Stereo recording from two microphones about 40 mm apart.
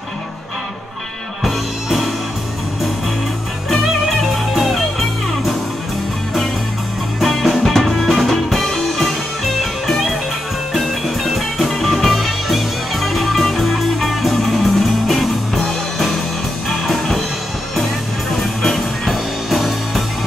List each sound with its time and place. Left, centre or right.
1.4 s music: centre
3.7 s music: centre
7.2 s music: centre
11.3 s music: centre
18.6 s music: centre